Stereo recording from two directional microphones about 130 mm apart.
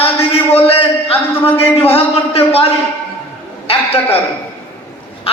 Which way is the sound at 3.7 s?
55° left (ahead or behind).